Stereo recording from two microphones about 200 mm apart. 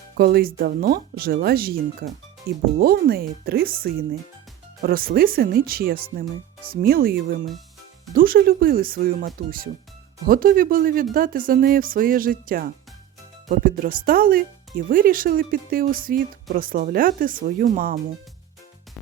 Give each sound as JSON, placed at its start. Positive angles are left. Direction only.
{"t": 0.2, "sound": "speech", "side_deg": -50}